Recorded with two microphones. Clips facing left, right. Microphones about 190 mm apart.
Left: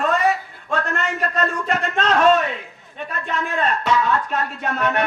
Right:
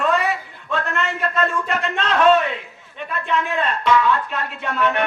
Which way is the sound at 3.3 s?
40° left (ahead or behind).